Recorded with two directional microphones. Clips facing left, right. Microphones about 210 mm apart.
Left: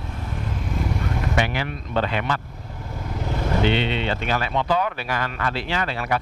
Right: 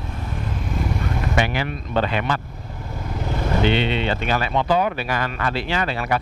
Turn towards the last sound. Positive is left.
turn(degrees=-10)  # may be behind; listen again after turning